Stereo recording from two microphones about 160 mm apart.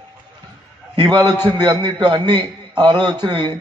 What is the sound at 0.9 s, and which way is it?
A man's voice, 25° right (ahead or behind).